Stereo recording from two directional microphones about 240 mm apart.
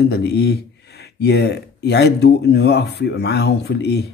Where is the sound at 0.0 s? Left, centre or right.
Left.